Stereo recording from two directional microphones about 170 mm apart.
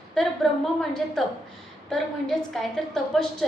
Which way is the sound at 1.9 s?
Centre (ahead or behind).